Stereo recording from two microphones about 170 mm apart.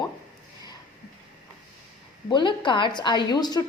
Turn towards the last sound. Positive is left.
turn(degrees=25)  # may be behind; listen again after turning